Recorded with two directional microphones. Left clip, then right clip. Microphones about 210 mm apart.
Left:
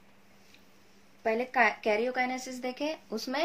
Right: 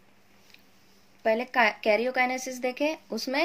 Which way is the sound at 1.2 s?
40° right (ahead or behind).